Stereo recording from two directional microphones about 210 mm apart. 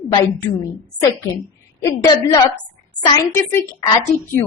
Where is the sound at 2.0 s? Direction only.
20° left (ahead or behind).